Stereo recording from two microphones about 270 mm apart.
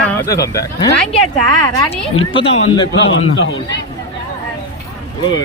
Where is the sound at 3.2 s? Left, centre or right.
Left.